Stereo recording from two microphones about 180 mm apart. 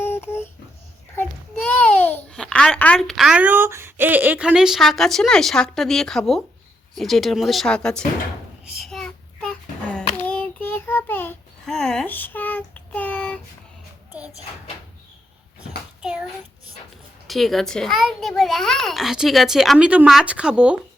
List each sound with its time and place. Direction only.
0.0 s a sound: 15° left (ahead or behind)
1.1 s a child's voice: 5° left (ahead or behind)
8.7 s child singing: centre (ahead or behind)
16.0 s child singing: 5° right (ahead or behind)
17.2 s a child's voice: centre (ahead or behind)